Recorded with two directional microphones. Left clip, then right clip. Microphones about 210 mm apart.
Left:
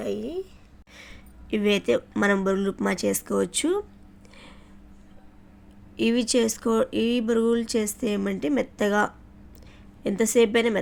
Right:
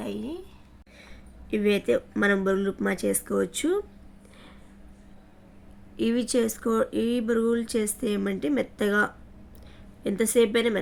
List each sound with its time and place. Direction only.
0.0 s a sound: 5° left (ahead or behind)
0.9 s speech: 10° left (ahead or behind)
6.0 s speech: 10° left (ahead or behind)